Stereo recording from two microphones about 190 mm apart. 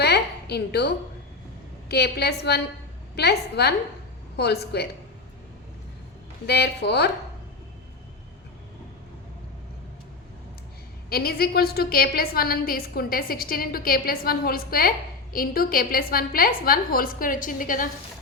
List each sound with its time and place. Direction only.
0.0 s a sound: 60° left (ahead or behind)
1.9 s speech: 60° left (ahead or behind)
6.4 s speech: 60° left (ahead or behind)
11.1 s a woman's voice: 55° left (ahead or behind)